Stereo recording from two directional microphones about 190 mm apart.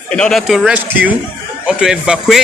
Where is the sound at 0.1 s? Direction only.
5° left (ahead or behind).